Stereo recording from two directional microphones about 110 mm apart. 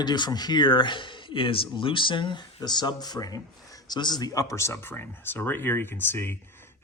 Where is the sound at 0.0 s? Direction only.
40° left (ahead or behind).